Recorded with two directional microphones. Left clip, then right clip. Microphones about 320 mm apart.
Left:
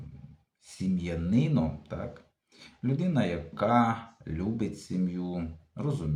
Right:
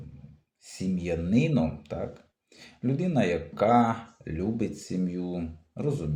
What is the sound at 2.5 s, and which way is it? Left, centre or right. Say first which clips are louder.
Speech: right 3 dB; centre.